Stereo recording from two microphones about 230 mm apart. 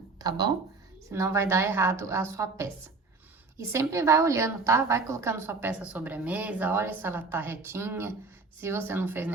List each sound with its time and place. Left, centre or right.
0.2 s a woman's voice: centre